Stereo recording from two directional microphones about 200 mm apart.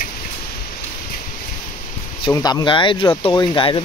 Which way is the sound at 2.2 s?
20° left (ahead or behind).